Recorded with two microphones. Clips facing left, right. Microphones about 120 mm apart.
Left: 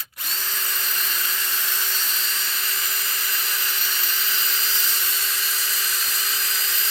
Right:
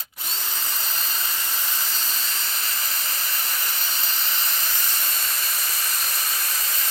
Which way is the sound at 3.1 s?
40° right (ahead or behind).